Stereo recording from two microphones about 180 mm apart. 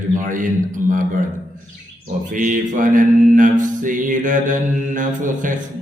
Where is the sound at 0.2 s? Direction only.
45° right (ahead or behind).